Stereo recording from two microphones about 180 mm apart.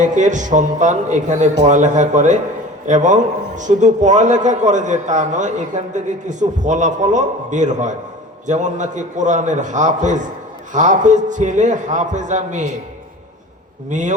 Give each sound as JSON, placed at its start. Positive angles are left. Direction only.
{"t": 0.0, "sound": "a man's voice", "side_deg": -45}
{"t": 13.9, "sound": "a man's voice", "side_deg": -45}